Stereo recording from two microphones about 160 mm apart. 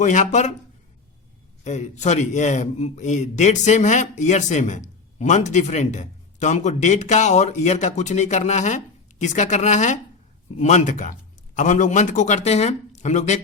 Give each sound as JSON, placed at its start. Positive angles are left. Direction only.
{"t": 0.0, "sound": "speech", "side_deg": 50}
{"t": 1.6, "sound": "speech", "side_deg": 45}